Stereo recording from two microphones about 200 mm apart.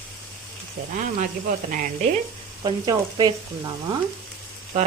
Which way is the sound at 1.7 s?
40° right (ahead or behind).